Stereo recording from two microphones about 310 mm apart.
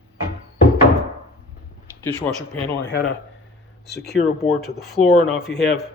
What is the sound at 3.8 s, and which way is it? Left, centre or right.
Speech, centre.